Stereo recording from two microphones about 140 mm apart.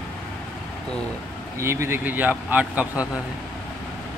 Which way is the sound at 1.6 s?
20° right (ahead or behind).